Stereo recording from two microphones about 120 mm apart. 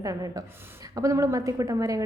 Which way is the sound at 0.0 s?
30° right (ahead or behind).